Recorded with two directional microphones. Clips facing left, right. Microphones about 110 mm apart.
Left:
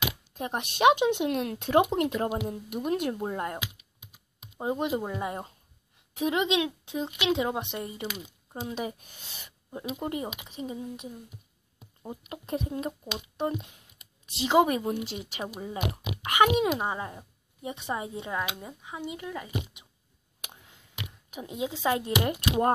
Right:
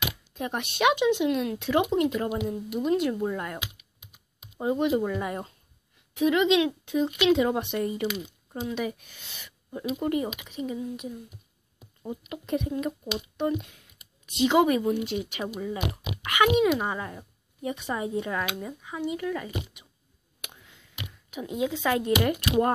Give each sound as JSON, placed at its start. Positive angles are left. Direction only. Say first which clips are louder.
{"t": 0.3, "sound": "speech", "louder": "right 1 dB", "side_deg": 35}
{"t": 1.1, "sound": "speech", "louder": "right 3 dB", "side_deg": 50}
{"t": 3.2, "sound": "speech", "louder": "right 2 dB", "side_deg": 30}
{"t": 4.6, "sound": "speech", "louder": "right 4 dB", "side_deg": 25}
{"t": 6.1, "sound": "speech", "louder": "right 5 dB", "side_deg": 35}
{"t": 8.5, "sound": "speech", "louder": "right 3 dB", "side_deg": 30}
{"t": 12.1, "sound": "speech", "louder": "right 4 dB", "side_deg": 35}
{"t": 16.6, "sound": "speech", "louder": "right 3 dB", "side_deg": 20}
{"t": 20.3, "sound": "finger snapping", "louder": "right 1 dB", "side_deg": 35}
{"t": 21.5, "sound": "speech", "louder": "right 2 dB", "side_deg": 25}